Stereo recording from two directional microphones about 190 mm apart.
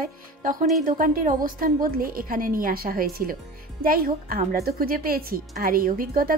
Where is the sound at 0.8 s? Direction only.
45° right (ahead or behind).